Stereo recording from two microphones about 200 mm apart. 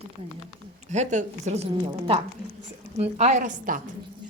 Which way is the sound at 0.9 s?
35° right (ahead or behind).